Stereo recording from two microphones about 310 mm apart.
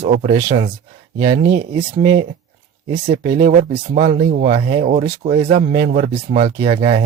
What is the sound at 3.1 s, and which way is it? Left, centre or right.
Speech, right.